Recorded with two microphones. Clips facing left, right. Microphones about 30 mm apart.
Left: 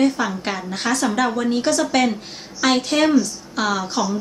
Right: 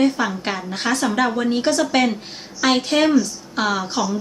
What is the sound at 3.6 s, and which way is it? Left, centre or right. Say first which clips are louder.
Speech: even; right.